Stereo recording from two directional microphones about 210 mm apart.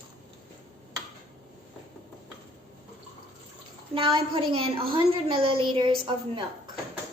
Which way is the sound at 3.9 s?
25° right (ahead or behind).